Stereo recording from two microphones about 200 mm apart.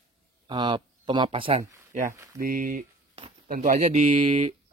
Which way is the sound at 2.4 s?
45° right (ahead or behind).